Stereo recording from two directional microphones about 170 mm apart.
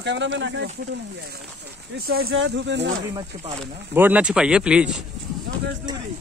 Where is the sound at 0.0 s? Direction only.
90° right.